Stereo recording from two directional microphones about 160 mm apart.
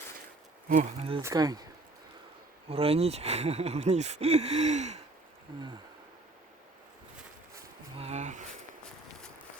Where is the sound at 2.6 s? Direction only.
35° right (ahead or behind).